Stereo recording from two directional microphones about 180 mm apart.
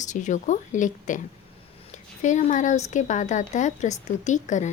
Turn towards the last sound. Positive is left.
turn(degrees=40)  # may be behind; listen again after turning